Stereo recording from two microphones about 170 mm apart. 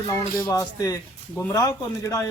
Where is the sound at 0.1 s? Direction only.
15° left (ahead or behind).